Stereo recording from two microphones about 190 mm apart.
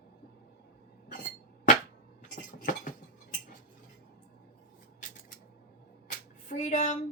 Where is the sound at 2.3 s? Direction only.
45° left (ahead or behind).